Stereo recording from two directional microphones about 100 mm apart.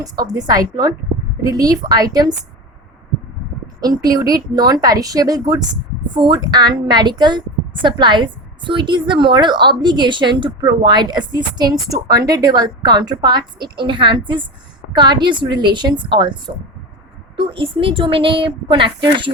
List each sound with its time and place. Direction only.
0.0 s a woman's voice: 40° right (ahead or behind)
3.8 s a woman's voice: 40° right (ahead or behind)